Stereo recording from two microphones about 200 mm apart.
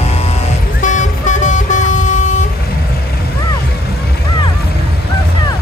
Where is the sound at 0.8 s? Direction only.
40° left (ahead or behind).